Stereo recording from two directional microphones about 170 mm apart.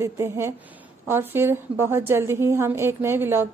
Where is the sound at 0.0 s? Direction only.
15° right (ahead or behind).